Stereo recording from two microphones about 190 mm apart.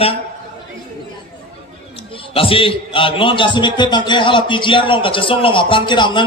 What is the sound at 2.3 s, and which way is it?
A man's voice, 30° left (ahead or behind).